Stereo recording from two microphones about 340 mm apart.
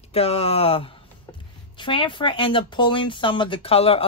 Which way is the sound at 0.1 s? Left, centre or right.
Centre.